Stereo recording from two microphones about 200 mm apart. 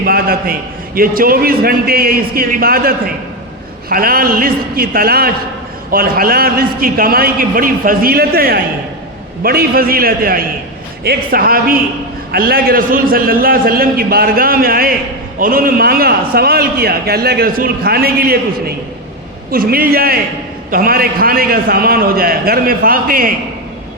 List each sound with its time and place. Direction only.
0.0 s a man's voice: 50° right (ahead or behind)